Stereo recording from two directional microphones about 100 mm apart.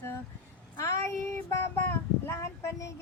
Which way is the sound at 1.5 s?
25° left (ahead or behind).